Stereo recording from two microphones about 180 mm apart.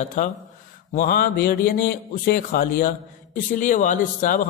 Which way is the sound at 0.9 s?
50° left (ahead or behind).